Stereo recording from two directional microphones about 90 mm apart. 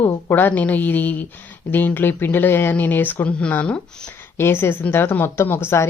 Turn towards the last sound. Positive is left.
turn(degrees=25)  # may be behind; listen again after turning